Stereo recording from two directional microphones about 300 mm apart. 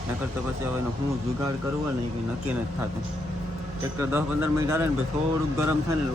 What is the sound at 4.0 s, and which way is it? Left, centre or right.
Speech, centre.